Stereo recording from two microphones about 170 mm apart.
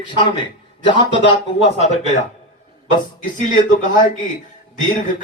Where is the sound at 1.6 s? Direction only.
40° left (ahead or behind).